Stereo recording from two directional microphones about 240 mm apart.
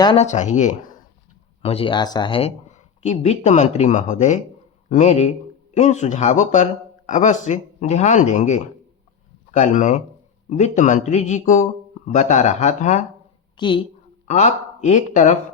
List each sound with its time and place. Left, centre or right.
0.0 s speech: left
13.6 s speech: centre